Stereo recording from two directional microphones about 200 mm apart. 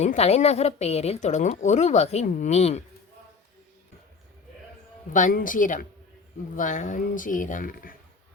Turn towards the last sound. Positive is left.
turn(degrees=45)  # may be behind; listen again after turning